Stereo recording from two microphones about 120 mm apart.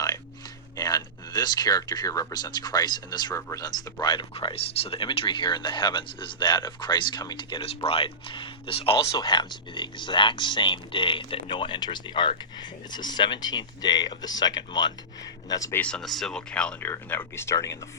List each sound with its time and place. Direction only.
0.8 s speech: 35° left (ahead or behind)
4.0 s speech: 40° left (ahead or behind)
4.4 s speech: 55° left (ahead or behind); by 7.6 s 40° left (ahead or behind)
7.9 s speech: 50° left (ahead or behind)
9.0 s speech: 35° left (ahead or behind)
15.7 s speech: 10° left (ahead or behind); by 17.7 s 25° left (ahead or behind)